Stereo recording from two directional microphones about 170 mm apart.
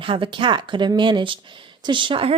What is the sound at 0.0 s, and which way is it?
A woman's voice, 30° right (ahead or behind).